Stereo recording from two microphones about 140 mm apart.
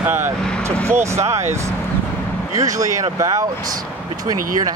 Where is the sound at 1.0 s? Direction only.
20° right (ahead or behind).